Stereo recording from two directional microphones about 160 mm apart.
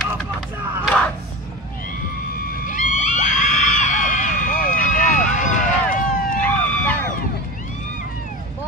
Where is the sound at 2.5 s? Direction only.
55° left (ahead or behind).